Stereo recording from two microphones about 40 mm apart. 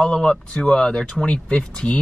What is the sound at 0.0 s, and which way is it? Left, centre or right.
Speech, centre.